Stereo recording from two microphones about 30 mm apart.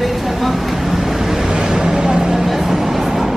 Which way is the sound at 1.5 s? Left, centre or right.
Right.